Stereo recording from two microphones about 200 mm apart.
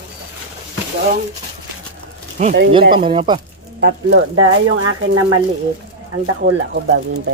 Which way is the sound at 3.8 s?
60° right (ahead or behind).